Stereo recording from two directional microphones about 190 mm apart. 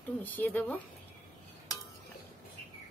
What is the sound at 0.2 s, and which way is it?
Speech, 10° left (ahead or behind).